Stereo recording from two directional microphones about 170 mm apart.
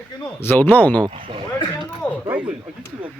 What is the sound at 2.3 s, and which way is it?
Speech, 5° right (ahead or behind).